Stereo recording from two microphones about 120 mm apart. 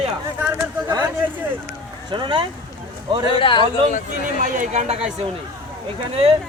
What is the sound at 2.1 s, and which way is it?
Speech, 40° right (ahead or behind).